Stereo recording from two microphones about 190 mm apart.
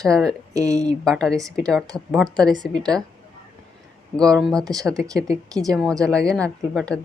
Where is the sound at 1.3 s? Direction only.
20° right (ahead or behind).